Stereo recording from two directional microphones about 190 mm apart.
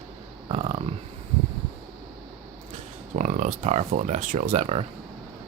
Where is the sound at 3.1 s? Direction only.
40° right (ahead or behind).